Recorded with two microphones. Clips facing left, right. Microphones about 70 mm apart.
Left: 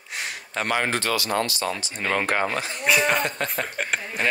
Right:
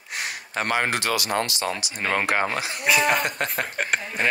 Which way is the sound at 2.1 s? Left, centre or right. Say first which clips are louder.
Even; centre.